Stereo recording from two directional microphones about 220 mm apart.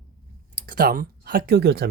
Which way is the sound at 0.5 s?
40° right (ahead or behind).